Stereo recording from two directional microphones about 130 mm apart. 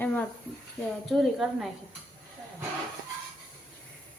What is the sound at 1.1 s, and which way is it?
Speech, centre (ahead or behind).